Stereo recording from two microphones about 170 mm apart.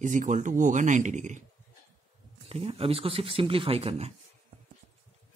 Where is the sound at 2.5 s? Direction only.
35° right (ahead or behind).